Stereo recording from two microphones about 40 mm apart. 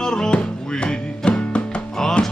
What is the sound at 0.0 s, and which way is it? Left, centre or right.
Music, centre.